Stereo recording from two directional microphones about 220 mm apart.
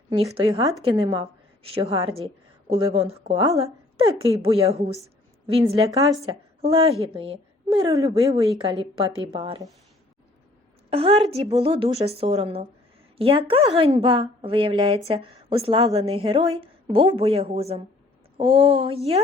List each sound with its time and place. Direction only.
0.3 s a woman's voice: 20° right (ahead or behind)
10.8 s a woman's voice: 25° right (ahead or behind)